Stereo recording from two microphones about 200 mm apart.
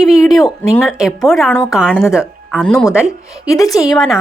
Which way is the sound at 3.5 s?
15° left (ahead or behind).